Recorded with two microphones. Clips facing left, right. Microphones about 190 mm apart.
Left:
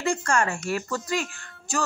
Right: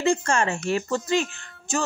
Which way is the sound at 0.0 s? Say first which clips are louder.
Right 2 dB; 25° right (ahead or behind).